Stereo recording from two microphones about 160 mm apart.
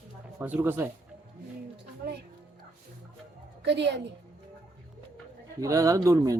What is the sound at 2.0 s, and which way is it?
Music, 75° right (ahead or behind).